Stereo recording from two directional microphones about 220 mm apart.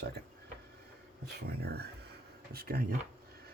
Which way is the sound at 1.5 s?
50° right (ahead or behind).